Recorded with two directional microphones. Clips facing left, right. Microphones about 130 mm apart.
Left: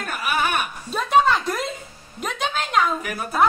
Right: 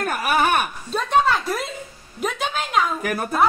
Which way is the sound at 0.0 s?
50° right (ahead or behind).